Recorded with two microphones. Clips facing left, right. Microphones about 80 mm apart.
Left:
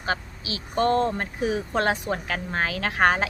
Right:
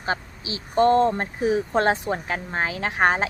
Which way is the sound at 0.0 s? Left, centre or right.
Right.